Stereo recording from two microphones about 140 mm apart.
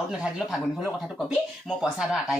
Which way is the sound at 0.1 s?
5° right (ahead or behind).